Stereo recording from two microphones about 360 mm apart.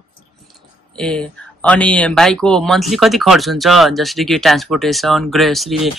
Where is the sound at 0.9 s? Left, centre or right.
Centre.